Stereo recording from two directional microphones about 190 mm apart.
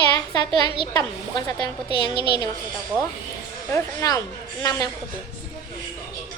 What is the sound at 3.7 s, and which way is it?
Speech, 20° left (ahead or behind).